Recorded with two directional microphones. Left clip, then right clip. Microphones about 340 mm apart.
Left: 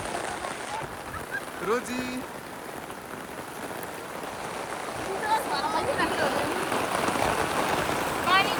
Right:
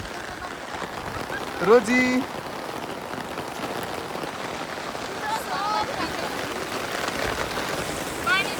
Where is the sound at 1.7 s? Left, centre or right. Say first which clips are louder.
Right 12 dB; centre.